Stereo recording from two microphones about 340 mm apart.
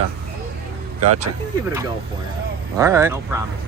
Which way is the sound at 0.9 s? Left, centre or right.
Right.